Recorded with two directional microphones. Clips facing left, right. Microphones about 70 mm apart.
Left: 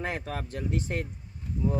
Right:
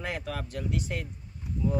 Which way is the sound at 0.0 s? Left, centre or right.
Left.